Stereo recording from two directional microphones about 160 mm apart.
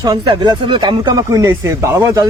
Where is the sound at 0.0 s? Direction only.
25° right (ahead or behind).